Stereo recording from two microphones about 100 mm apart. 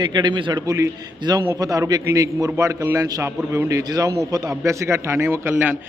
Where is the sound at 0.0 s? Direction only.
45° right (ahead or behind).